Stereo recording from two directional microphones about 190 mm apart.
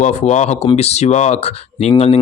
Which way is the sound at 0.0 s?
35° left (ahead or behind).